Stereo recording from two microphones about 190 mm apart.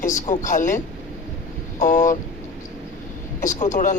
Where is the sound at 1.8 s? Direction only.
40° left (ahead or behind).